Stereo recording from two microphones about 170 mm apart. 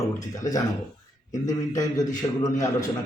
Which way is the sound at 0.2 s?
20° left (ahead or behind).